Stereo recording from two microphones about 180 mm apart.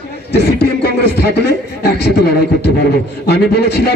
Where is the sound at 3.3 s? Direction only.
65° left (ahead or behind).